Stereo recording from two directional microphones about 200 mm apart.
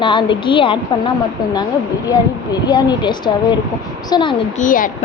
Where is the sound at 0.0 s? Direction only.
25° left (ahead or behind).